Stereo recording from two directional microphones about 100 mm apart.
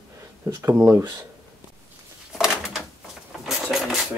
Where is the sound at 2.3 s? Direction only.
5° right (ahead or behind).